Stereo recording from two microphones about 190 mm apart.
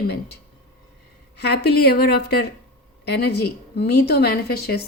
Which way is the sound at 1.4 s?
60° left (ahead or behind).